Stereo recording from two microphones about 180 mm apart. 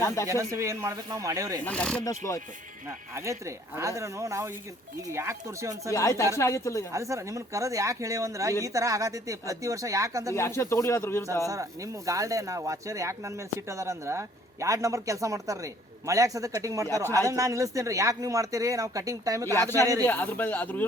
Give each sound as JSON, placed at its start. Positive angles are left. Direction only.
{"t": 0.0, "sound": "speech", "side_deg": 15}
{"t": 0.3, "sound": "speech", "side_deg": -15}
{"t": 1.6, "sound": "speech", "side_deg": 5}
{"t": 2.0, "sound": "speech", "side_deg": 20}
{"t": 3.2, "sound": "speech", "side_deg": -15}
{"t": 5.9, "sound": "speech", "side_deg": 15}
{"t": 6.9, "sound": "speech", "side_deg": -15}
{"t": 10.3, "sound": "speech", "side_deg": 15}
{"t": 11.4, "sound": "speech", "side_deg": -20}
{"t": 19.5, "sound": "speech", "side_deg": 15}